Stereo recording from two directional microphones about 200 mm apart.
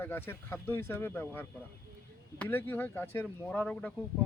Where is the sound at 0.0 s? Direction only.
10° left (ahead or behind).